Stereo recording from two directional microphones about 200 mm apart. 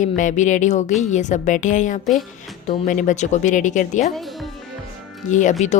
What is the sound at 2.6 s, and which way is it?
A woman's voice, 35° left (ahead or behind).